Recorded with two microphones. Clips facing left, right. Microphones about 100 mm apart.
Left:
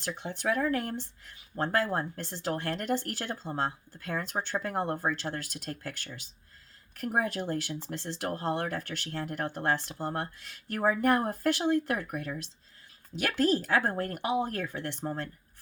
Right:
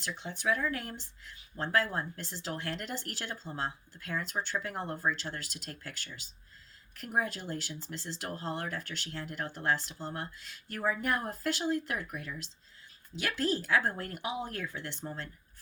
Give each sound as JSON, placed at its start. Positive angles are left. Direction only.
{"t": 0.0, "sound": "speech", "side_deg": 50}
{"t": 7.0, "sound": "speech", "side_deg": 55}
{"t": 13.7, "sound": "speech", "side_deg": 40}
{"t": 14.6, "sound": "speech", "side_deg": 70}